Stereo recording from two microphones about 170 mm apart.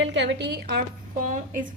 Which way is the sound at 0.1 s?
90° right.